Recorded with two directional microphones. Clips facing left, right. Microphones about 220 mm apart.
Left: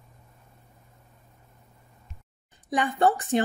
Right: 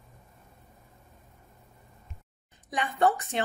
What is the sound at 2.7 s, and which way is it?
Speech, 30° left (ahead or behind).